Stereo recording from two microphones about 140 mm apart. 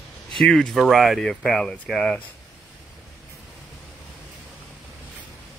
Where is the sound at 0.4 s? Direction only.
5° left (ahead or behind).